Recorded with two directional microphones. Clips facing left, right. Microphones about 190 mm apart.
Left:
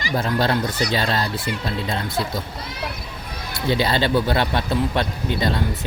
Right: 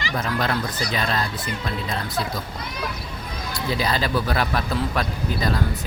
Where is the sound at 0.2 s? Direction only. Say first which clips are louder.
Left 4 dB; 30° left (ahead or behind).